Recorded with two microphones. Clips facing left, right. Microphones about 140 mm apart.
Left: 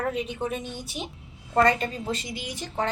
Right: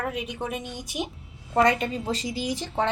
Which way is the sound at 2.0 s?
35° right (ahead or behind).